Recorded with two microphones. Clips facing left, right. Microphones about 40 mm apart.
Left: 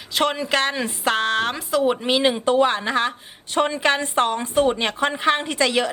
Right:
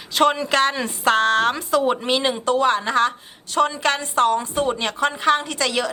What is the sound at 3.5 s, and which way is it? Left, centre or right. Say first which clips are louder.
Speech: even; left.